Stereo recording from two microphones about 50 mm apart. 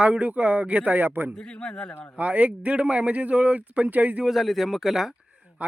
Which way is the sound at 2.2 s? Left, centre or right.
Right.